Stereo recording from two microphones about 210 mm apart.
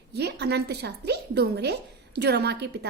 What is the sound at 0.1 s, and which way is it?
Speech, 50° right (ahead or behind).